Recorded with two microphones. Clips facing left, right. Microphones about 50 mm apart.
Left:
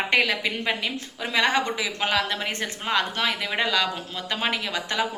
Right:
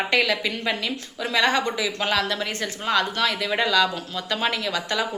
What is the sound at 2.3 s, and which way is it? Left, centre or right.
A woman's voice, left.